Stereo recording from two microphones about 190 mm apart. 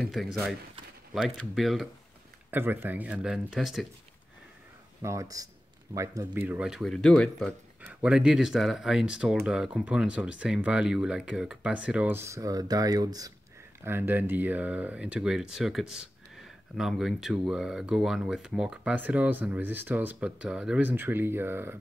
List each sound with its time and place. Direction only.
0.0 s speech: centre (ahead or behind)
2.5 s speech: 10° right (ahead or behind)
5.0 s speech: 15° right (ahead or behind)